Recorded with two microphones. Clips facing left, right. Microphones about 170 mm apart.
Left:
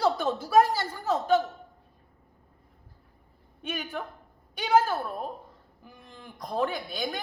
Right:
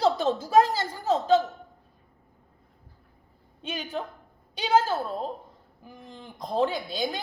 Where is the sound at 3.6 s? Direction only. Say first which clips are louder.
Right 1 dB; 20° right (ahead or behind).